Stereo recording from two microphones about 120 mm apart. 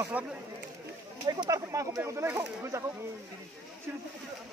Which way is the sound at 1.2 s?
30° right (ahead or behind).